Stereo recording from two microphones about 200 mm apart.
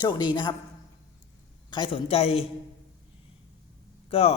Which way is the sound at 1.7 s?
25° left (ahead or behind).